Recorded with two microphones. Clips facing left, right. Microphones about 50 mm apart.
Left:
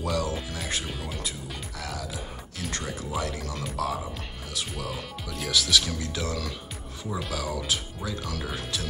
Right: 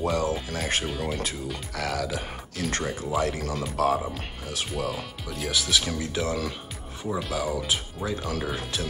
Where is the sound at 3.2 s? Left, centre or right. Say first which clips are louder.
Right 5 dB; right.